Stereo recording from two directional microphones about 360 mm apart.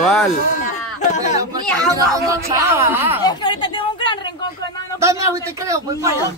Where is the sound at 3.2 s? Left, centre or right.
Centre.